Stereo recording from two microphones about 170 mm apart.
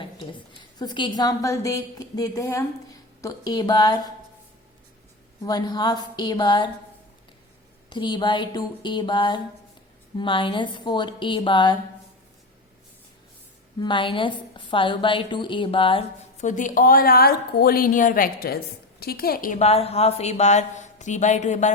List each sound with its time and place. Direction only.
0.0 s a woman's voice: 25° left (ahead or behind)
5.4 s a woman's voice: 25° left (ahead or behind)
7.9 s a woman's voice: 25° left (ahead or behind)
13.7 s a woman's voice: 30° left (ahead or behind)
16.4 s a woman's voice: 45° left (ahead or behind)